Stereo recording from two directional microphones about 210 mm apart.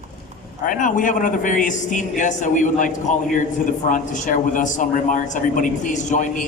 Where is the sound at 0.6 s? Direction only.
40° left (ahead or behind).